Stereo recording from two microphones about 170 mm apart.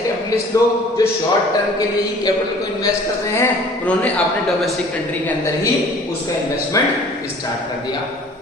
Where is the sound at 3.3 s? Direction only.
10° left (ahead or behind).